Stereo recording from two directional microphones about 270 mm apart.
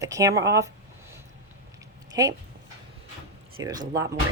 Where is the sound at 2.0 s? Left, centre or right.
Centre.